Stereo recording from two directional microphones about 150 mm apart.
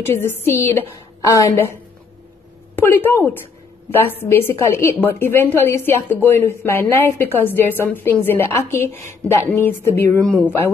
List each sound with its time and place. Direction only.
0.1 s a woman's voice: 15° left (ahead or behind)
2.8 s a woman's voice: 15° left (ahead or behind)